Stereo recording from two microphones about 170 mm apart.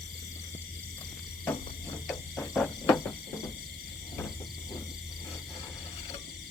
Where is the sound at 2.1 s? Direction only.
Centre (ahead or behind).